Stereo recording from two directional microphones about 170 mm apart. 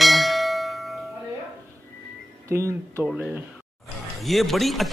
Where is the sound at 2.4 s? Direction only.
15° right (ahead or behind).